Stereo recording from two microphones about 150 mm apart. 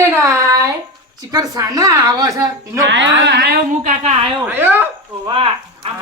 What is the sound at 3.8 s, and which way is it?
Speech, 45° right (ahead or behind).